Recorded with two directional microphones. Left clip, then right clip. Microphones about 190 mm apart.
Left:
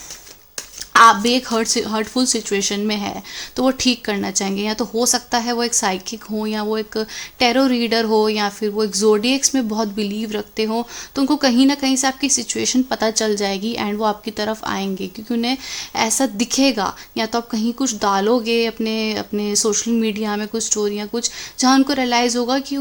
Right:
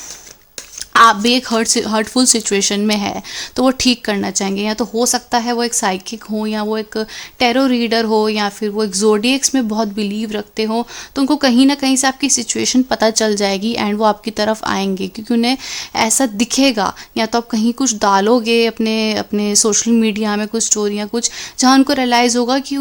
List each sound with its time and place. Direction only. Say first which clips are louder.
0.9 s speech: right 1 dB; 25° right (ahead or behind)